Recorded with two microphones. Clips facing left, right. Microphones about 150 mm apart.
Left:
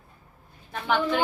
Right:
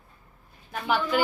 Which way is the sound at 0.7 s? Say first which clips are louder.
Left 1 dB; 5° right (ahead or behind).